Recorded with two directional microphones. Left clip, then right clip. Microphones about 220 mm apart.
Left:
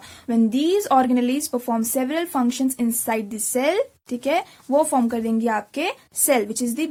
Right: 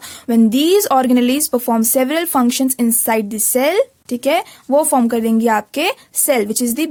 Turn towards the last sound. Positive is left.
turn(degrees=-35)  # may be behind; listen again after turning